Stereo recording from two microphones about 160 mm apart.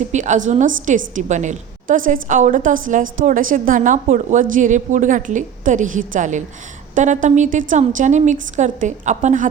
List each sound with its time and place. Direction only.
0.1 s a woman's voice: 50° right (ahead or behind)